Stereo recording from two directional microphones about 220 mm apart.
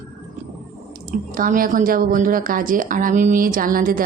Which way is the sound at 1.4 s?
40° right (ahead or behind).